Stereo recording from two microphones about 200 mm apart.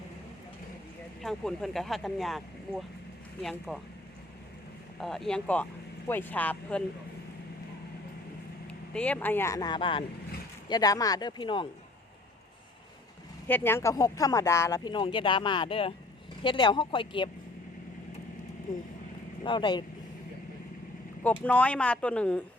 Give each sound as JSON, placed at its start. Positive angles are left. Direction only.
{"t": 1.2, "sound": "speech", "side_deg": 0}
{"t": 4.9, "sound": "speech", "side_deg": 0}
{"t": 8.9, "sound": "speech", "side_deg": 5}
{"t": 13.5, "sound": "speech", "side_deg": 10}
{"t": 19.4, "sound": "speech", "side_deg": 25}
{"t": 21.4, "sound": "speech", "side_deg": 5}